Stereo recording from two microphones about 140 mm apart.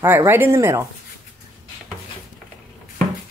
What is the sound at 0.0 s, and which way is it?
Speech, 15° right (ahead or behind).